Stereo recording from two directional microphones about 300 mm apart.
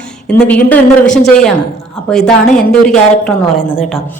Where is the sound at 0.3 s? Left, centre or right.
Centre.